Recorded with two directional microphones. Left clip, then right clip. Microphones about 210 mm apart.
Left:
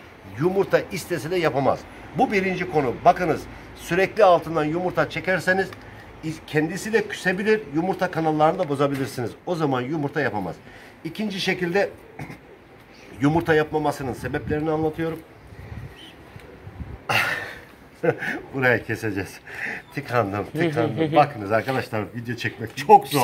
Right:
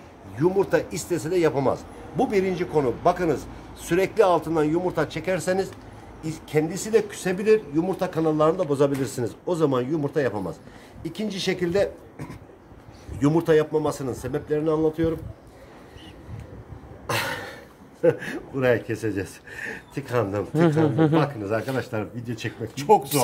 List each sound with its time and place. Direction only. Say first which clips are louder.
0.4 s a man's voice: left 1 dB; 5° right (ahead or behind)
17.1 s a sound: left 5 dB; 10° right (ahead or behind)
18.0 s a man's voice: right 1 dB; centre (ahead or behind)
20.8 s a man's voice: right 2 dB; 25° right (ahead or behind)
21.2 s speech: left 6 dB; 5° left (ahead or behind)